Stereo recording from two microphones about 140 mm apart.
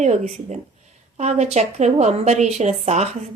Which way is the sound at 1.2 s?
50° right (ahead or behind).